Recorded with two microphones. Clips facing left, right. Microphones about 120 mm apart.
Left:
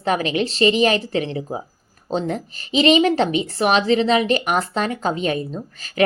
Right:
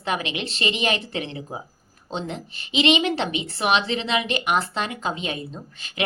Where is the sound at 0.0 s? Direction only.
40° left (ahead or behind).